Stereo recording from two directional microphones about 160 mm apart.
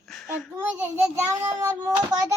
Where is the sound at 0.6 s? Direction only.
15° right (ahead or behind).